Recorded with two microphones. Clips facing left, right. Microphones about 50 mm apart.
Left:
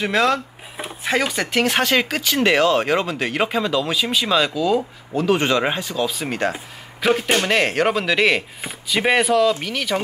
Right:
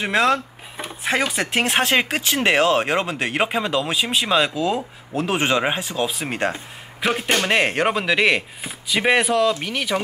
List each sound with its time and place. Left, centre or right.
0.0 s speech: centre
1.6 s speech: right
7.1 s speech: centre